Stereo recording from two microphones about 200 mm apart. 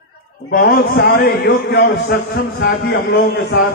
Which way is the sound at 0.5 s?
50° left (ahead or behind).